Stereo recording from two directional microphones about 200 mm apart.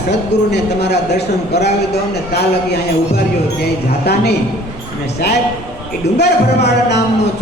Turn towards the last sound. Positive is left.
turn(degrees=55)  # may be behind; listen again after turning